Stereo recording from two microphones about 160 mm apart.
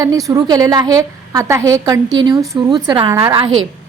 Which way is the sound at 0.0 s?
20° right (ahead or behind).